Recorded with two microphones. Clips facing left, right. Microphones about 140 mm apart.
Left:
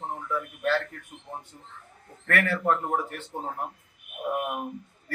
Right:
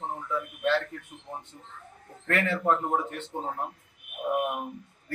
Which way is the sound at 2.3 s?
20° right (ahead or behind).